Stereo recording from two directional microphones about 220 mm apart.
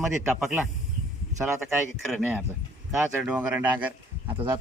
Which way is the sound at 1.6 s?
5° right (ahead or behind).